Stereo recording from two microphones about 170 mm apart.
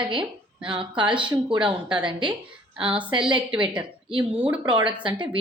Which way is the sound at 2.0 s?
30° right (ahead or behind).